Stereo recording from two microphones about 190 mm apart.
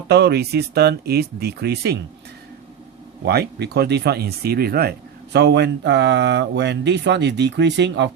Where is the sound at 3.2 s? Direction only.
60° right (ahead or behind).